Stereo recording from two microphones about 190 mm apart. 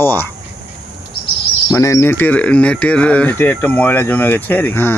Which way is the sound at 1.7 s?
15° left (ahead or behind).